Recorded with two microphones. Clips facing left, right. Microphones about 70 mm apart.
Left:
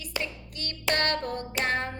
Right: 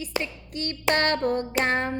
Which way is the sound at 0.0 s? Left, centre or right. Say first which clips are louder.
Right 4 dB; right.